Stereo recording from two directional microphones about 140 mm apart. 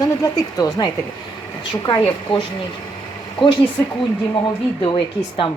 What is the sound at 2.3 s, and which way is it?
Speech, 40° left (ahead or behind).